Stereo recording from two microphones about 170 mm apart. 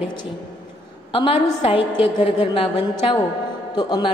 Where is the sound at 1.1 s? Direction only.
30° left (ahead or behind).